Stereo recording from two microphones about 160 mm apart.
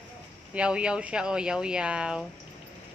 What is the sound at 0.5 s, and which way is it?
Speech, 5° right (ahead or behind).